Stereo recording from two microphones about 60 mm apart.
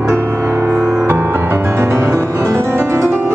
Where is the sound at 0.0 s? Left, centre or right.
Right.